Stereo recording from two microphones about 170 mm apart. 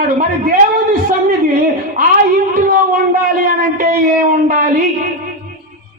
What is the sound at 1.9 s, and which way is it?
A man's voice, 55° right (ahead or behind).